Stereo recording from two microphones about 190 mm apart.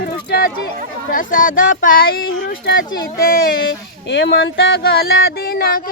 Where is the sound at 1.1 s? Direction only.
45° left (ahead or behind).